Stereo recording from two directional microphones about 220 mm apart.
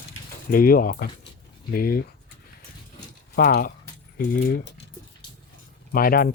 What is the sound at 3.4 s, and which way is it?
Speech, 40° left (ahead or behind).